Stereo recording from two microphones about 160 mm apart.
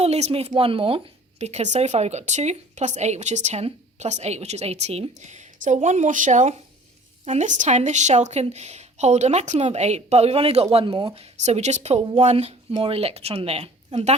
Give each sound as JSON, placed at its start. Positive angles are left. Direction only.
{"t": 0.0, "sound": "speech", "side_deg": -40}
{"t": 11.1, "sound": "speech", "side_deg": -40}